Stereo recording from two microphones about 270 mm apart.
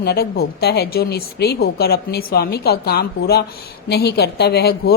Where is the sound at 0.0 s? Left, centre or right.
Left.